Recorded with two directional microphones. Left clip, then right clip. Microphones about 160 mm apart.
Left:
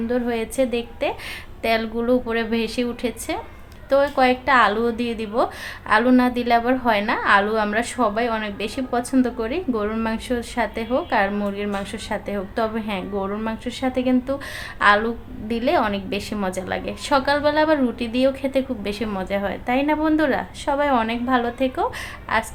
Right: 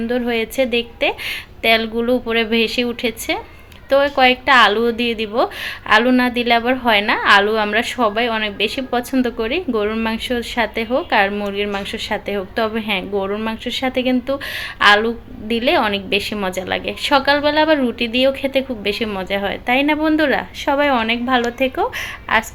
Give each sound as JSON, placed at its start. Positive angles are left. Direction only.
{"t": 0.1, "sound": "a woman's voice", "side_deg": -5}
{"t": 20.7, "sound": "a woman's voice", "side_deg": -20}
{"t": 20.9, "sound": "a woman's voice", "side_deg": -5}